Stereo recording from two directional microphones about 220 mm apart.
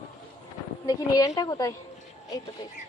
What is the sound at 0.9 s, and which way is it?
Speech, 15° left (ahead or behind).